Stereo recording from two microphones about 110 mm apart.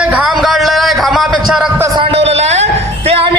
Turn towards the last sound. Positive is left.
turn(degrees=-60)  # may be behind; listen again after turning